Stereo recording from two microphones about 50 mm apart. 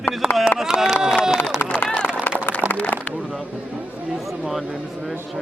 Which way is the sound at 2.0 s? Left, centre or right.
Left.